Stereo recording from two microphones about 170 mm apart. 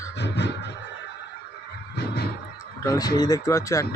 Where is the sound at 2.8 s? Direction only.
20° left (ahead or behind).